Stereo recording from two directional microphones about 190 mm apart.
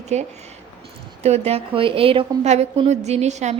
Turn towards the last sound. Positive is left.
turn(degrees=-35)  # may be behind; listen again after turning